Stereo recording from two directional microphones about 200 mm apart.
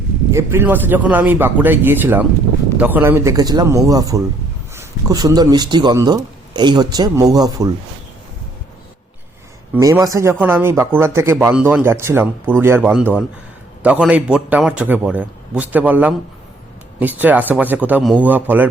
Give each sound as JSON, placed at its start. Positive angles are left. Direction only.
{"t": 0.3, "sound": "speech", "side_deg": -15}
{"t": 9.7, "sound": "speech", "side_deg": -10}